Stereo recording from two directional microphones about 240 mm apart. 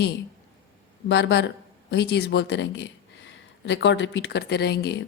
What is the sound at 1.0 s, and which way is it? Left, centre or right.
A woman's voice, left.